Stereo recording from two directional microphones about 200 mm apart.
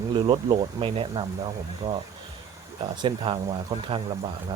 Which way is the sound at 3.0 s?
25° right (ahead or behind).